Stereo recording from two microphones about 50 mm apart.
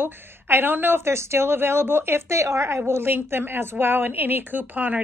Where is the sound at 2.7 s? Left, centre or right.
Right.